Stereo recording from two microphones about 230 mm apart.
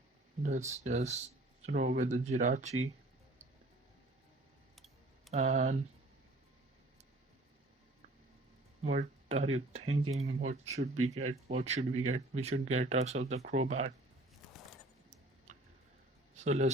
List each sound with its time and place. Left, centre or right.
0.4 s speech: right
5.3 s speech: right
8.8 s speech: right
9.8 s speech: right
10.4 s speech: right
16.4 s speech: right